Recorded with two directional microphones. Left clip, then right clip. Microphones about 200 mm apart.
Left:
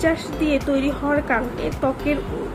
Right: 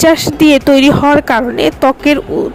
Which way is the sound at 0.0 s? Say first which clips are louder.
Right 13 dB; 55° right (ahead or behind).